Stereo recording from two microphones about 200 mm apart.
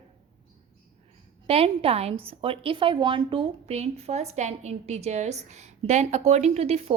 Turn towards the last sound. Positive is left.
turn(degrees=-30)  # may be behind; listen again after turning